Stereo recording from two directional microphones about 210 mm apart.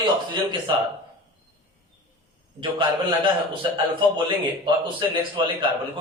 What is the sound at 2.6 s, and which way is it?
Speech, 25° right (ahead or behind).